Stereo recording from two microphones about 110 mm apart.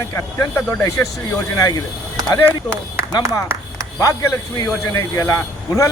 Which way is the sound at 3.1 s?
40° left (ahead or behind).